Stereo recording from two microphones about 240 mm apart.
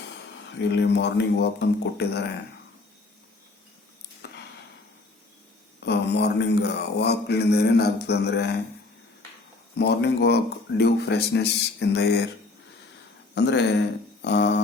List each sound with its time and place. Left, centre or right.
0.5 s mantra: left
4.2 s a sound: left
5.8 s mantra: left
9.7 s mantra: left
13.3 s mantra: left
14.2 s a sound: left